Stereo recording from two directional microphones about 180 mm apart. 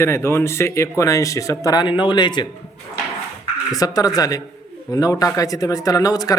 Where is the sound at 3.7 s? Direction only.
20° left (ahead or behind).